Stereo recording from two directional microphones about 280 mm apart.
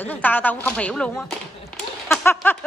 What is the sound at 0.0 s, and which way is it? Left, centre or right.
A woman's voice, centre.